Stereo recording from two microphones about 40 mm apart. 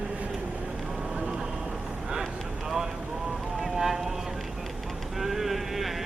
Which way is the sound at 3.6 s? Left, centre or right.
Centre.